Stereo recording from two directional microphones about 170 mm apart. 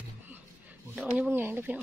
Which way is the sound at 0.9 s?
5° right (ahead or behind).